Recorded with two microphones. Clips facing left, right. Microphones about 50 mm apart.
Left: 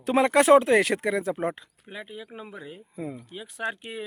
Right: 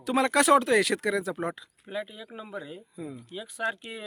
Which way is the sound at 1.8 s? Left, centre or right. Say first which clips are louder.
Right 3 dB; centre.